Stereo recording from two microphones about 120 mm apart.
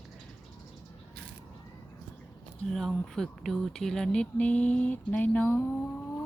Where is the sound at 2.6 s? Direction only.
Centre (ahead or behind).